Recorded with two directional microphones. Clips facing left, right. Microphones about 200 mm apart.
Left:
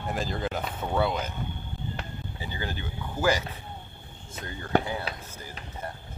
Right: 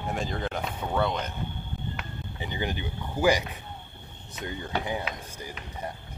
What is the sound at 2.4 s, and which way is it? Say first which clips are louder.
Speech: right 4 dB; 20° right (ahead or behind).